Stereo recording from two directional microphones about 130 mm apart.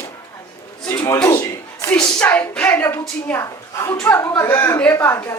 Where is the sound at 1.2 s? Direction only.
20° left (ahead or behind).